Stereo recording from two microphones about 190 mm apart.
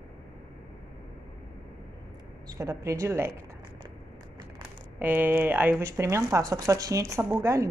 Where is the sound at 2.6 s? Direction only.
15° right (ahead or behind).